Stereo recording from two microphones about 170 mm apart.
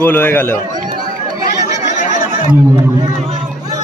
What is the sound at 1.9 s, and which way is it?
Chatter, 45° left (ahead or behind).